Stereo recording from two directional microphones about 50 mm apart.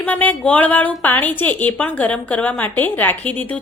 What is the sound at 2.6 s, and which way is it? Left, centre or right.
Speech, left.